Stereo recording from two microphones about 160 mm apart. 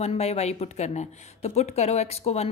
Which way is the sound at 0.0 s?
40° left (ahead or behind).